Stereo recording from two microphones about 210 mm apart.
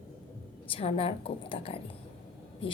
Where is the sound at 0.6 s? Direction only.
25° left (ahead or behind).